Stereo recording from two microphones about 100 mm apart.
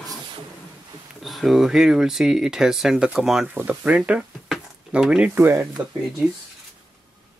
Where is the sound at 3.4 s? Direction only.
15° right (ahead or behind).